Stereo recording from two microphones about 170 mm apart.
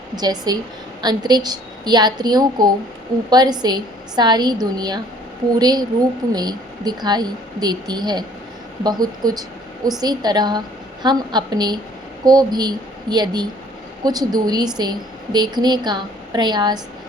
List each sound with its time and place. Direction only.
0.2 s a woman's voice: 25° right (ahead or behind)